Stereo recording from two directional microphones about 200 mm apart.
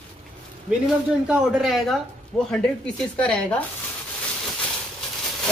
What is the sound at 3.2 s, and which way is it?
Speech, 5° left (ahead or behind).